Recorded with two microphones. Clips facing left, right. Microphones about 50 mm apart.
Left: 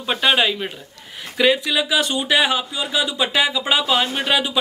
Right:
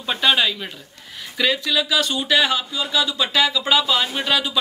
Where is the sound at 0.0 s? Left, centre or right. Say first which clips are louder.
Left 1 dB; centre.